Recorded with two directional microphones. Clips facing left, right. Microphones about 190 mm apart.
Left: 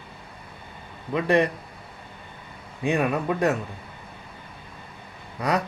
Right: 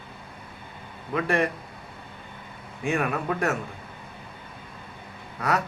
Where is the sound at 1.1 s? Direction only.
20° left (ahead or behind).